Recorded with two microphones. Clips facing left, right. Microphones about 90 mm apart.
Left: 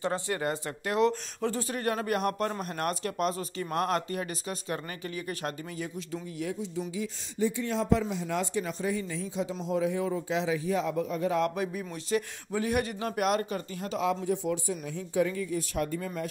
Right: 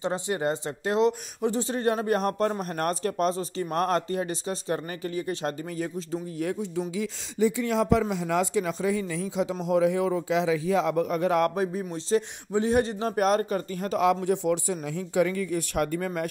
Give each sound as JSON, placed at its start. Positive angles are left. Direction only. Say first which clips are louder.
{"t": 0.0, "sound": "speech", "louder": "right 3 dB", "side_deg": -20}
{"t": 6.4, "sound": "speech", "louder": "right 4 dB", "side_deg": -55}
{"t": 7.0, "sound": "speech", "louder": "right 5 dB", "side_deg": -90}
{"t": 9.4, "sound": "speech", "louder": "right 6 dB", "side_deg": -90}
{"t": 11.5, "sound": "speech", "louder": "right 5 dB", "side_deg": -35}
{"t": 13.9, "sound": "speech", "louder": "right 5 dB", "side_deg": -70}